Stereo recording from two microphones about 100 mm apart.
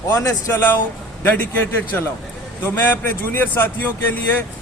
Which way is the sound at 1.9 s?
20° left (ahead or behind).